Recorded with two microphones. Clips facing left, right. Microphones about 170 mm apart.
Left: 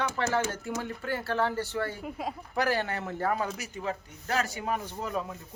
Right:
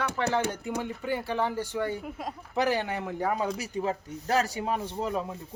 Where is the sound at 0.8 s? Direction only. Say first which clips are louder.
Right 2 dB; 15° right (ahead or behind).